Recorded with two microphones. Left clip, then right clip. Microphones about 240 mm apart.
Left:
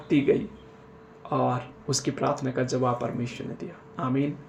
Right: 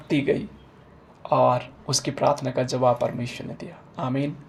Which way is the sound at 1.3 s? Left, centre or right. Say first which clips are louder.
Right 7 dB; centre.